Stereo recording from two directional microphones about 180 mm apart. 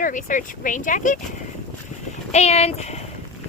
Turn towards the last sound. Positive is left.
turn(degrees=35)  # may be behind; listen again after turning